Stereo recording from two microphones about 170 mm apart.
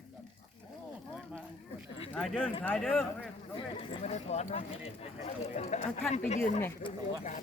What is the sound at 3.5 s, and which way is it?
Speech, 30° left (ahead or behind).